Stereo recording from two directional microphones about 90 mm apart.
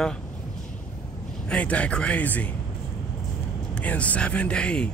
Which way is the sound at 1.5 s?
15° left (ahead or behind).